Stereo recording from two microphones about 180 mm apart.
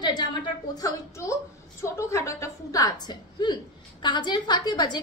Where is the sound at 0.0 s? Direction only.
25° left (ahead or behind).